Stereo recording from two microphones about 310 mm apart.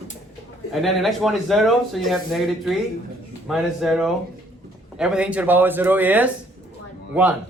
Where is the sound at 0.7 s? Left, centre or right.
Centre.